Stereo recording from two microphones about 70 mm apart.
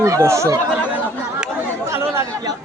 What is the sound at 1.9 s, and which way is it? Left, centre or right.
Chatter, right.